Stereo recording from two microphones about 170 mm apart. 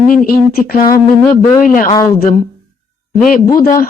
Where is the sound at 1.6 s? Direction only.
55° left (ahead or behind).